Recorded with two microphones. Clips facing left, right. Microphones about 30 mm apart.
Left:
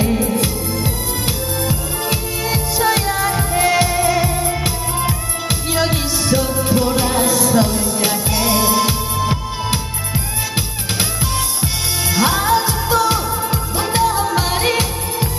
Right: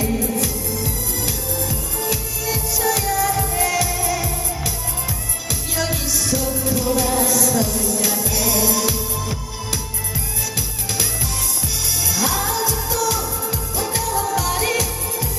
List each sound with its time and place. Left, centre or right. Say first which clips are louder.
0.0 s music: left 4 dB; left
12.1 s music: left 8 dB; left